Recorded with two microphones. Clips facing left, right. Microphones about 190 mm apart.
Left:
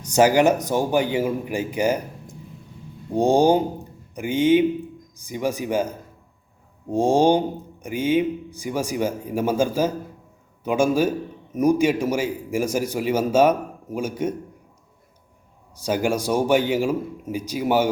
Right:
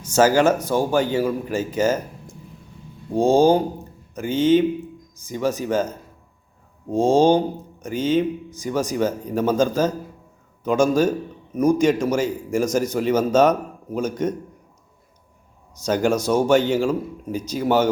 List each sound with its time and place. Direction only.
0.1 s a man's voice: 15° left (ahead or behind)
3.2 s a man's voice: 15° left (ahead or behind)
15.8 s a man's voice: 10° left (ahead or behind)